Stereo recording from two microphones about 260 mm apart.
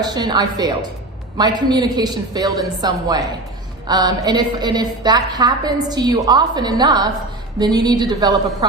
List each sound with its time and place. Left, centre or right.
0.0 s a woman's voice: centre